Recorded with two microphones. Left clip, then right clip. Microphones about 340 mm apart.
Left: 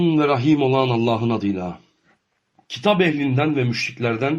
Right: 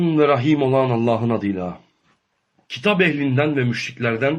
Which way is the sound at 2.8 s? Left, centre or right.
Centre.